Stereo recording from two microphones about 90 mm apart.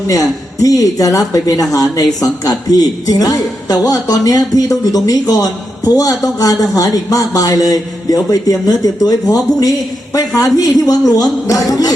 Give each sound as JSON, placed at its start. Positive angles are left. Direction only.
{"t": 0.1, "sound": "a man's voice", "side_deg": 40}